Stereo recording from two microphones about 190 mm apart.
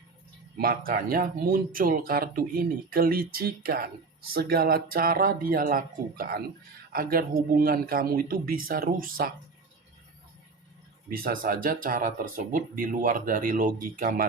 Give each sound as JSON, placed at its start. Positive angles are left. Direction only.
{"t": 0.5, "sound": "speech", "side_deg": -50}
{"t": 11.1, "sound": "speech", "side_deg": -50}